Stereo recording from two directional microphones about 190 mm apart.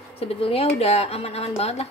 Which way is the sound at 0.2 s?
30° left (ahead or behind).